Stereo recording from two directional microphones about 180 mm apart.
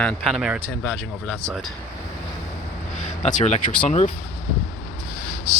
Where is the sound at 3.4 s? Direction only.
40° left (ahead or behind).